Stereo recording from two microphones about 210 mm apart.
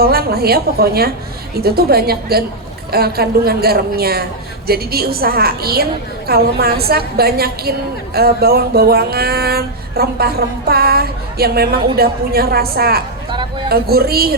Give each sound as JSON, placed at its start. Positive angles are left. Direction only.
{"t": 0.0, "sound": "a man's voice", "side_deg": -45}